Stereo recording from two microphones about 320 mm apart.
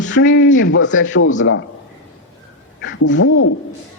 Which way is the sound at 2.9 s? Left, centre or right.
Left.